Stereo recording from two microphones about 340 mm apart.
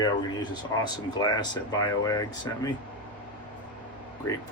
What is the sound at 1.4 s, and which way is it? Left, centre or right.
Speech, centre.